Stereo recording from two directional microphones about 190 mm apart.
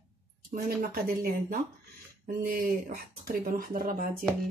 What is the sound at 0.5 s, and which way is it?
Speech, 50° right (ahead or behind).